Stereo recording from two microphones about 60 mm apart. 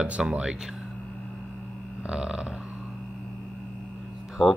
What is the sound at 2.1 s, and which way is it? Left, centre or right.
Speech, centre.